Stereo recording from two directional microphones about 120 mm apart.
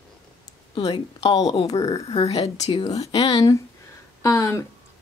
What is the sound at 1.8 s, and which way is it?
Speech, 35° left (ahead or behind).